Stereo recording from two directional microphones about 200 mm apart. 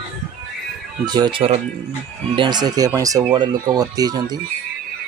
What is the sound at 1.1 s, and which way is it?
Speech, 20° right (ahead or behind).